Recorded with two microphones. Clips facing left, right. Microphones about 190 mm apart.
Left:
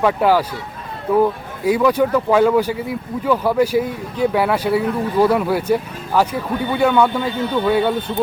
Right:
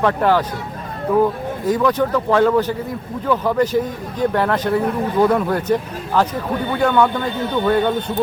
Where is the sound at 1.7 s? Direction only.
10° left (ahead or behind).